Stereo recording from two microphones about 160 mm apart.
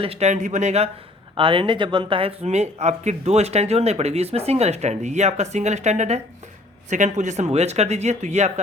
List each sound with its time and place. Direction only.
0.0 s speech: 40° right (ahead or behind)
1.4 s speech: 30° right (ahead or behind)